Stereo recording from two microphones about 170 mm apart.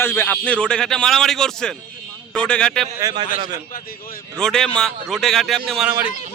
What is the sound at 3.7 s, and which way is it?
Speech, 55° left (ahead or behind).